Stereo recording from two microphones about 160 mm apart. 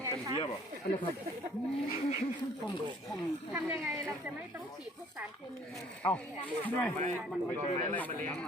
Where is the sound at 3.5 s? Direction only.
10° right (ahead or behind).